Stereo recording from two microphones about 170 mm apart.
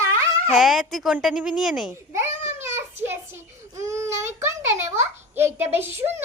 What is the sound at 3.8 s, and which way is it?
Child singing, 15° right (ahead or behind).